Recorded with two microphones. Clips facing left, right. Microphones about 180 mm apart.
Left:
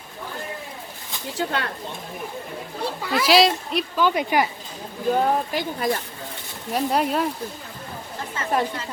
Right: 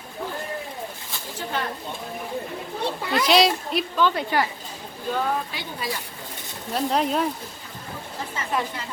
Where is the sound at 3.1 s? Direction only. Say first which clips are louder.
Left 2 dB; 5° left (ahead or behind).